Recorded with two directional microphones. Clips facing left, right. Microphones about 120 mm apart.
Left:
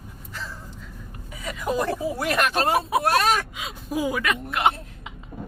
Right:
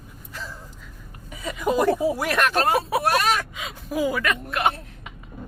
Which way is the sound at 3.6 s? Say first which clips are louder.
Right 2 dB; 15° left (ahead or behind).